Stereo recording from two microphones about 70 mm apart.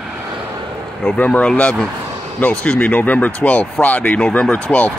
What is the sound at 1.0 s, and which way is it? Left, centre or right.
Speech, left.